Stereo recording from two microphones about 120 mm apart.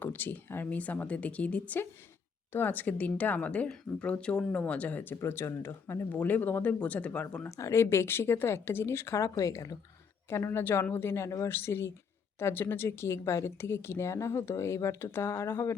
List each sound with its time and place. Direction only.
0.0 s a woman's voice: 15° left (ahead or behind)